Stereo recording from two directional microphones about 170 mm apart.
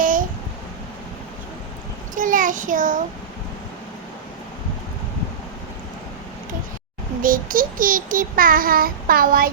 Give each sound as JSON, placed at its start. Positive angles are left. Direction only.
{"t": 0.0, "sound": "a sound", "side_deg": -50}
{"t": 2.1, "sound": "child singing", "side_deg": -50}
{"t": 7.2, "sound": "child singing", "side_deg": -55}